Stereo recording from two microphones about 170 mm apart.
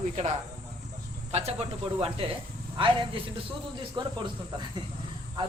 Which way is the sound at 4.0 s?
25° right (ahead or behind).